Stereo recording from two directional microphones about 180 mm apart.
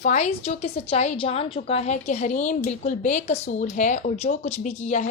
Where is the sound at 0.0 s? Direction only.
40° left (ahead or behind).